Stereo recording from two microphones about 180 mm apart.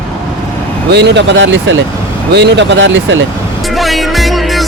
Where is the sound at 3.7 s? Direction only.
Centre (ahead or behind).